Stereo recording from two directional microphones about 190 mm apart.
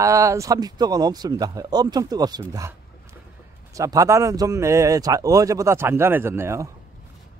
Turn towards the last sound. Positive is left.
turn(degrees=-15)  # may be behind; listen again after turning